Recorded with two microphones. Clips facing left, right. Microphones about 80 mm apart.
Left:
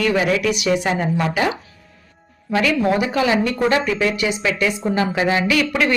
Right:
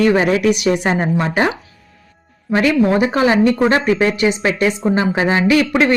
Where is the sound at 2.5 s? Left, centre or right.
Right.